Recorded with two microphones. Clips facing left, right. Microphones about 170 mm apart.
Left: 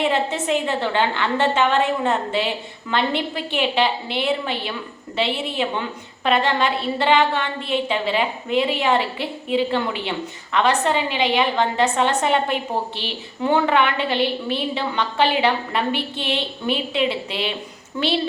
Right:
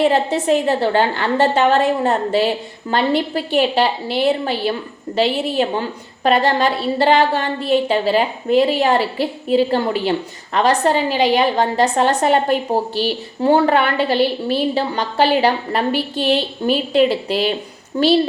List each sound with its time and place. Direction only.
0.0 s a woman's voice: 35° right (ahead or behind)